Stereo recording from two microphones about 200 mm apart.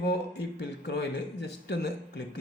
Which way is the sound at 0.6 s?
60° left (ahead or behind).